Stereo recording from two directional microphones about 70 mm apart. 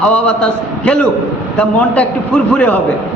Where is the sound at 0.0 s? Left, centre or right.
Centre.